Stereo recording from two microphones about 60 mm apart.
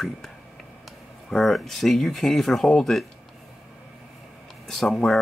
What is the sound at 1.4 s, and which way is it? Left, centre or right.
Speech, centre.